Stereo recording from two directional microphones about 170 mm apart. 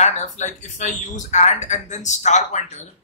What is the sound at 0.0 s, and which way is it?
Speech, 45° left (ahead or behind).